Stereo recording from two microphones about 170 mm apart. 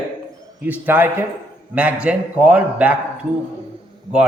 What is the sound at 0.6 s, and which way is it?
A man's voice, 10° right (ahead or behind).